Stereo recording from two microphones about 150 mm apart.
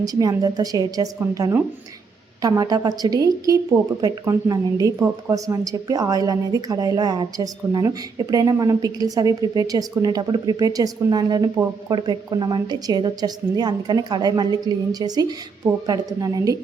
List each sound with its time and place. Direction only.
0.0 s a woman's voice: 25° right (ahead or behind)